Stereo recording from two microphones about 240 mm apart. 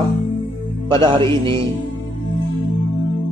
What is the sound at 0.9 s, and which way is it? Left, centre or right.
Music, centre.